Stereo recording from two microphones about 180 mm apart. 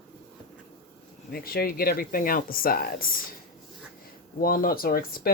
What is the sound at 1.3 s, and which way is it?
Speech, 55° left (ahead or behind).